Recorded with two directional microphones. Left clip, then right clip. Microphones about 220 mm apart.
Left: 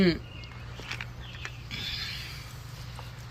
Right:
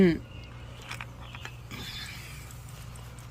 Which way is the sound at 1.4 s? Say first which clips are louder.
Left 5 dB; 25° right (ahead or behind).